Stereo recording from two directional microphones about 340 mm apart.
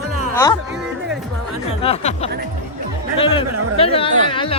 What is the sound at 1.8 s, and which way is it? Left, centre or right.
Speech, centre.